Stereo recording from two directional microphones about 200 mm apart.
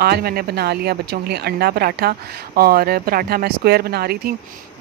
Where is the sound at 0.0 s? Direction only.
50° right (ahead or behind).